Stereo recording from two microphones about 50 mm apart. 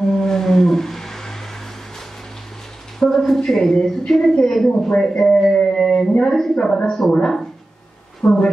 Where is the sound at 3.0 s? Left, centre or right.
Centre.